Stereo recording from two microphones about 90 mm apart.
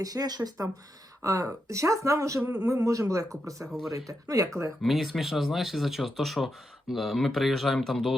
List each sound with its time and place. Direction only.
0.0 s speech: 45° right (ahead or behind)
3.7 s speech: centre (ahead or behind)
3.9 s speech: 40° right (ahead or behind)
4.8 s speech: centre (ahead or behind)